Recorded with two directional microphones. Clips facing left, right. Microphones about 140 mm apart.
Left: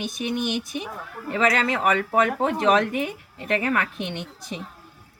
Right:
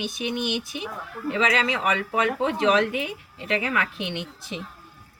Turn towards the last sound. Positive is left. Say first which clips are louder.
# even
turn(degrees=45)  # may be behind; listen again after turning